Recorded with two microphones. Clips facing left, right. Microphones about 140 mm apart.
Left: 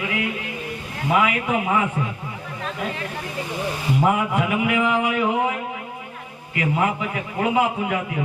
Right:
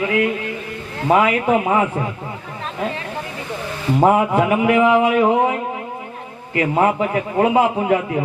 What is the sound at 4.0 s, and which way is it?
Speech, 35° right (ahead or behind).